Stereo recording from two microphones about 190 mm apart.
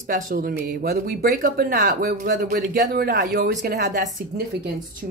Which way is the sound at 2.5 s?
55° right (ahead or behind).